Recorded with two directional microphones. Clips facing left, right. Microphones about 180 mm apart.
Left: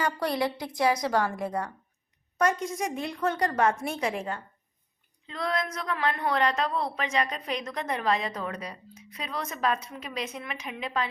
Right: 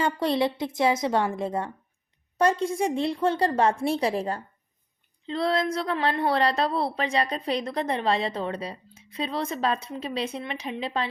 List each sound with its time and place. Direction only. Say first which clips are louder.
0.0 s a woman's voice: right 4 dB; 25° right (ahead or behind)